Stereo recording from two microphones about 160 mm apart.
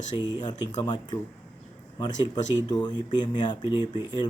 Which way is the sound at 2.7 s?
30° left (ahead or behind).